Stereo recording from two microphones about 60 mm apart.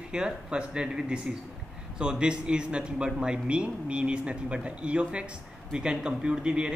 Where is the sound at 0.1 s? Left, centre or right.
Centre.